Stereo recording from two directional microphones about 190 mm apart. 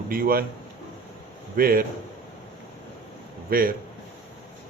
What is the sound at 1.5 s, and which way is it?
Speech, 50° right (ahead or behind).